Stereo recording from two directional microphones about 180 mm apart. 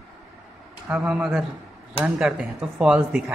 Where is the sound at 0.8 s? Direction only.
5° right (ahead or behind).